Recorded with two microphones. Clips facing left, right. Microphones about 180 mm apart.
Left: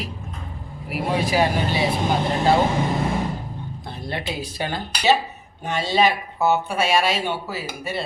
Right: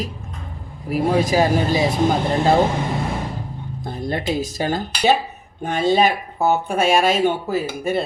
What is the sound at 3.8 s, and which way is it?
Speech, 45° right (ahead or behind).